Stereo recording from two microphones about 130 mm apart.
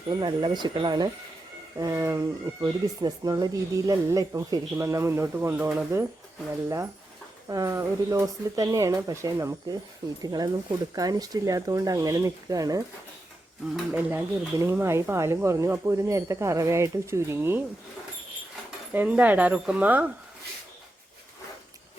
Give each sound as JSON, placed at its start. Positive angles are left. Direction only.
{"t": 0.1, "sound": "speech", "side_deg": -35}
{"t": 13.9, "sound": "speech", "side_deg": -15}
{"t": 18.9, "sound": "speech", "side_deg": -10}